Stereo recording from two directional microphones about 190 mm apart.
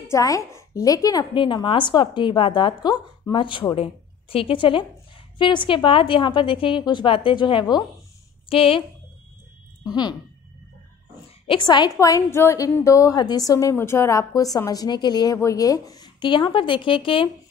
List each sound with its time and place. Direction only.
0.1 s a woman's voice: 15° left (ahead or behind)
11.4 s a woman's voice: 25° left (ahead or behind)